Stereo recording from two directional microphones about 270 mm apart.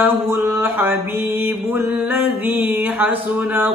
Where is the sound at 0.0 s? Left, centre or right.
Centre.